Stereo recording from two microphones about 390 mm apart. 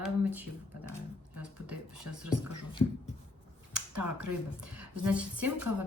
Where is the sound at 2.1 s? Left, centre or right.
Right.